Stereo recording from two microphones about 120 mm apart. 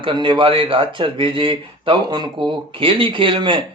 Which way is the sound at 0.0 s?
40° right (ahead or behind).